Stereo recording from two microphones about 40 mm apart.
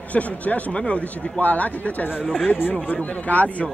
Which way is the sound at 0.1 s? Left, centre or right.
Left.